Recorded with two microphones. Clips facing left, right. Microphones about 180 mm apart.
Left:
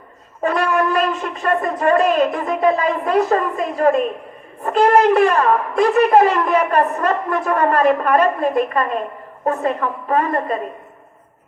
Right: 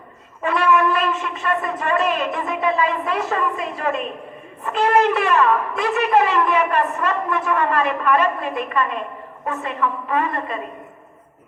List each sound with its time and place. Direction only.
0.4 s a woman's voice: 40° left (ahead or behind)